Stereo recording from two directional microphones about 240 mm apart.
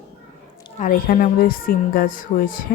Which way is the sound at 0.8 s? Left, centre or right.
Left.